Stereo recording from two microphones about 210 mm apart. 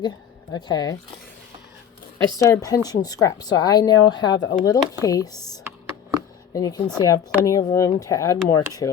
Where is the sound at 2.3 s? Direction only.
15° left (ahead or behind).